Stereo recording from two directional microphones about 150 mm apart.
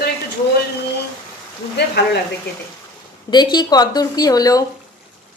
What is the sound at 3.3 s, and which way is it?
Speech, 30° left (ahead or behind).